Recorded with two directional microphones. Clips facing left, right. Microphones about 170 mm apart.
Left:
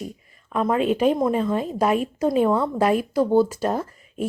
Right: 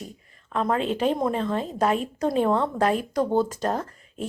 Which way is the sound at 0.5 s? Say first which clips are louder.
Left 4 dB; 10° left (ahead or behind).